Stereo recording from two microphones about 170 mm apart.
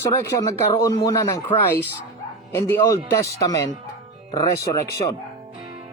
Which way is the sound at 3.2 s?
20° left (ahead or behind).